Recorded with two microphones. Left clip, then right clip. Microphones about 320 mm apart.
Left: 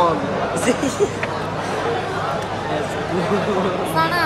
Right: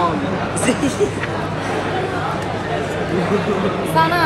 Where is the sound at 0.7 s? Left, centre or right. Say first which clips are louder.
Right 3 dB; left.